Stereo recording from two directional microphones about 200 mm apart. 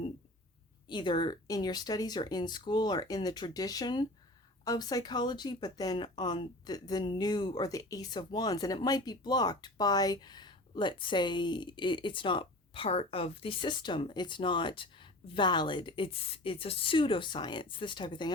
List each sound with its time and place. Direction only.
0.9 s speech: 20° left (ahead or behind)